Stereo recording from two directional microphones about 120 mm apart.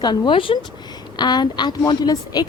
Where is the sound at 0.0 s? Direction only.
40° left (ahead or behind).